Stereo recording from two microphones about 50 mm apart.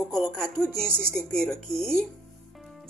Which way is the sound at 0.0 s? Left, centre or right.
Centre.